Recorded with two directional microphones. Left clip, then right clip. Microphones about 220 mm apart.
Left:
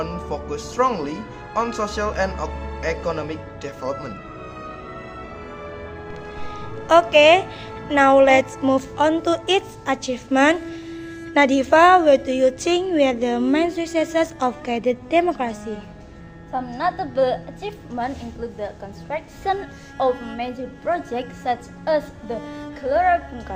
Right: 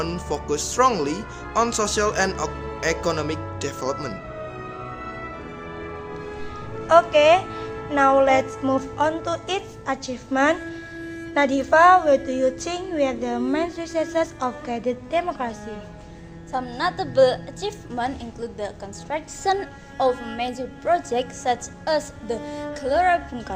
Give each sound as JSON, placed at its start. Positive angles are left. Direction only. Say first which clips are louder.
{"t": 0.0, "sound": "speech", "louder": "even", "side_deg": -45}
{"t": 6.8, "sound": "a woman's voice", "louder": "left 2 dB", "side_deg": 35}
{"t": 16.5, "sound": "a woman's voice", "louder": "left 2 dB", "side_deg": -35}
{"t": 19.1, "sound": "a woman's voice", "louder": "right 1 dB", "side_deg": -30}
{"t": 22.4, "sound": "speech", "louder": "right 1 dB", "side_deg": 0}
{"t": 22.9, "sound": "a woman's voice", "louder": "left 1 dB", "side_deg": -40}